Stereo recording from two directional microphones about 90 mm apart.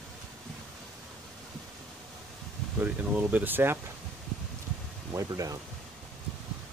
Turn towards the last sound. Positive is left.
turn(degrees=-40)  # may be behind; listen again after turning